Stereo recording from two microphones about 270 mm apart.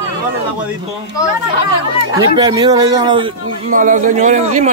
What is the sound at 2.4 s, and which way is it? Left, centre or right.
Speech, centre.